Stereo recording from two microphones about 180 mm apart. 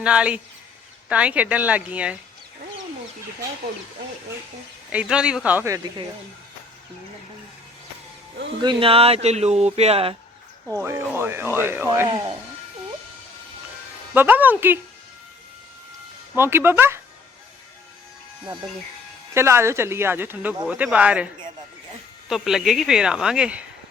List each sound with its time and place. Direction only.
0.0 s speech: 5° right (ahead or behind)
4.9 s speech: 5° right (ahead or behind)
8.6 s speech: 30° right (ahead or behind)
10.7 s speech: 15° right (ahead or behind)
14.1 s speech: 10° right (ahead or behind)
16.3 s speech: 15° right (ahead or behind)
19.3 s speech: 15° right (ahead or behind)
22.3 s speech: centre (ahead or behind)